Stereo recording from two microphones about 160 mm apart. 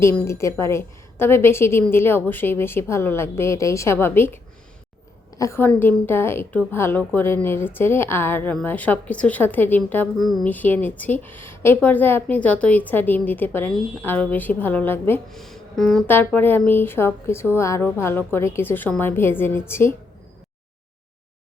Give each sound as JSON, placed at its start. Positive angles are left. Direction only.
{"t": 0.0, "sound": "speech", "side_deg": 15}
{"t": 5.4, "sound": "speech", "side_deg": 15}
{"t": 10.2, "sound": "speech", "side_deg": 0}
{"t": 15.3, "sound": "music", "side_deg": 0}
{"t": 16.0, "sound": "speech", "side_deg": 10}